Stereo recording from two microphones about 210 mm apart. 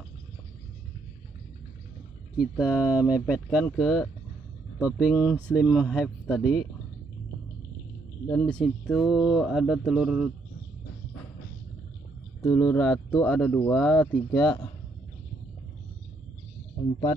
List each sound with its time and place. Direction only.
2.3 s speech: 5° right (ahead or behind)
8.3 s speech: 5° left (ahead or behind)
12.4 s speech: 10° left (ahead or behind)
14.3 s speech: 15° left (ahead or behind)